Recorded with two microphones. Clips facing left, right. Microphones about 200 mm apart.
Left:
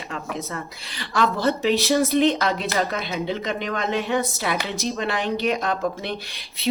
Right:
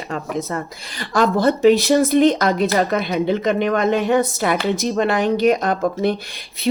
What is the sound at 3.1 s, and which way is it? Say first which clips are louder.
Speech: right 9 dB; 55° right (ahead or behind).